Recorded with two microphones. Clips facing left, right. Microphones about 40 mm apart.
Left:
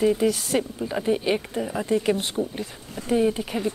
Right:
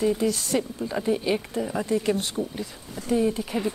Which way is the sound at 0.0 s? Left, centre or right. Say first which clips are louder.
Left 3 dB; centre.